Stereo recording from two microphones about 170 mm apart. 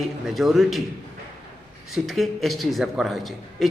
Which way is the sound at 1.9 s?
Centre (ahead or behind).